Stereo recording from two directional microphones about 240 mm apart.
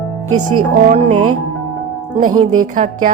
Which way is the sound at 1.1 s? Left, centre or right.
Right.